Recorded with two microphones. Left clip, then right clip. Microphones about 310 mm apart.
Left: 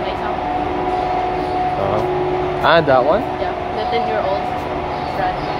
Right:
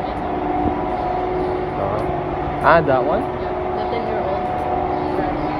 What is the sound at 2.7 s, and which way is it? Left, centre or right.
Speech, centre.